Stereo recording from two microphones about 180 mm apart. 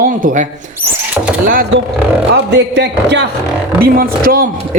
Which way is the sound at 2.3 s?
75° right (ahead or behind).